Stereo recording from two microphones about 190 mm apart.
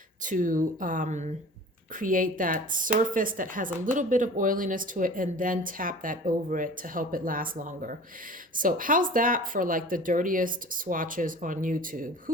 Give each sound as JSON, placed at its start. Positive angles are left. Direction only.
{"t": 0.2, "sound": "a woman's voice", "side_deg": -45}